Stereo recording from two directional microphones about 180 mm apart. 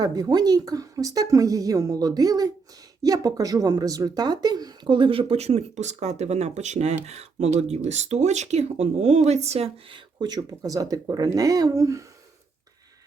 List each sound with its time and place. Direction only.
0.0 s speech: 20° right (ahead or behind)